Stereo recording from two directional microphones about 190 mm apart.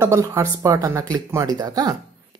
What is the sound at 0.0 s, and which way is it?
Speech, 15° right (ahead or behind).